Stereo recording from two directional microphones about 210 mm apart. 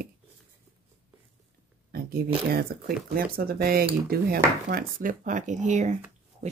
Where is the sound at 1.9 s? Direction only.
45° right (ahead or behind).